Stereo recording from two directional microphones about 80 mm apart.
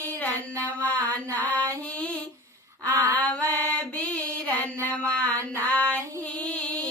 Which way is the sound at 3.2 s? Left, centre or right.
Centre.